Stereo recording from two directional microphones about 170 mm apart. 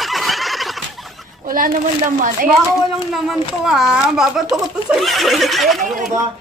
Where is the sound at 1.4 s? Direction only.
55° right (ahead or behind).